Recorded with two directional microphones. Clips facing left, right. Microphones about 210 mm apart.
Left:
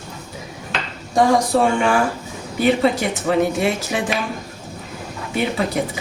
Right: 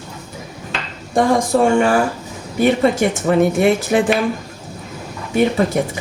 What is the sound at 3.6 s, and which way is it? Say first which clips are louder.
Speech: right 7 dB; 55° right (ahead or behind).